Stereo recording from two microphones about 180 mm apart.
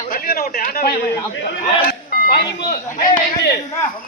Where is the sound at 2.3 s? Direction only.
65° left (ahead or behind).